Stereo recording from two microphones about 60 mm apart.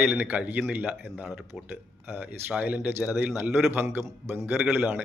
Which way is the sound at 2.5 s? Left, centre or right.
Right.